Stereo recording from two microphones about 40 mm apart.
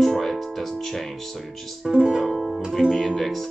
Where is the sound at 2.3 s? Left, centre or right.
Centre.